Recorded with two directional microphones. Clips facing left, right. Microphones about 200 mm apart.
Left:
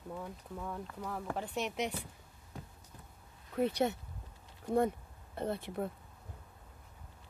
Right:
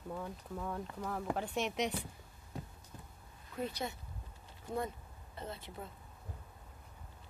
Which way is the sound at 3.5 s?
65° left (ahead or behind).